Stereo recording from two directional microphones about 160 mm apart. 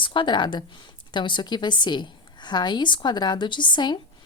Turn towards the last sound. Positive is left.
turn(degrees=30)  # may be behind; listen again after turning